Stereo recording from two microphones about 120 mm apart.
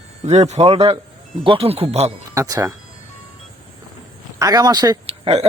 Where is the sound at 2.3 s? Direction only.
25° right (ahead or behind).